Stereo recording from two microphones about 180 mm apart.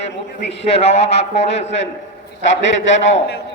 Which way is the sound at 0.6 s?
35° left (ahead or behind).